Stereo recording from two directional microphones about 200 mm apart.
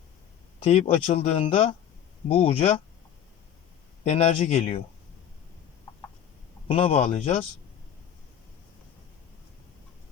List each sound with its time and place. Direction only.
0.6 s speech: 30° left (ahead or behind)
4.0 s speech: 30° left (ahead or behind)
6.7 s speech: 30° left (ahead or behind)